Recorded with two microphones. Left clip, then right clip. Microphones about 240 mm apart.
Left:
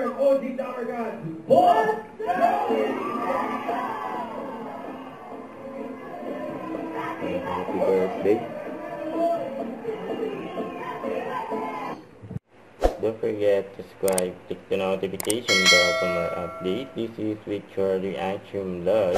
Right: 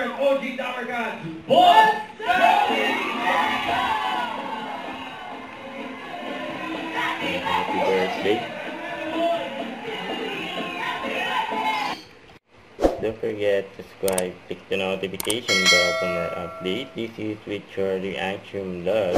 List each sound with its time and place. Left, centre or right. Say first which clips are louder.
0.0 s music: even; centre
12.8 s speech: right 1 dB; centre
18.9 s a sound: left 1 dB; centre